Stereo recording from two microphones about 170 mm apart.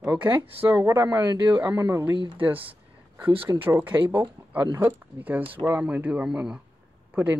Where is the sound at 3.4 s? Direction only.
15° right (ahead or behind).